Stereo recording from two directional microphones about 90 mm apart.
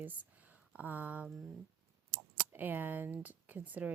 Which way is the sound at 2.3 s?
20° right (ahead or behind).